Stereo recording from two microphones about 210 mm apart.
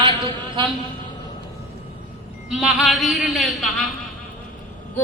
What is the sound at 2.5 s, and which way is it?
Speech, centre (ahead or behind).